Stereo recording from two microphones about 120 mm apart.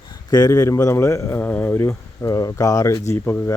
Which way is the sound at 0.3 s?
30° left (ahead or behind).